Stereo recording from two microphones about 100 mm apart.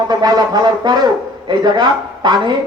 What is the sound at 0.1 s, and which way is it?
A man's voice, 40° right (ahead or behind).